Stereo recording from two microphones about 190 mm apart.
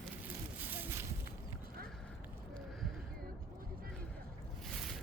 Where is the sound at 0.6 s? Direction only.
10° right (ahead or behind).